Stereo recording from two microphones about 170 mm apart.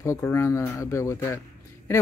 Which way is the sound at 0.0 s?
15° left (ahead or behind).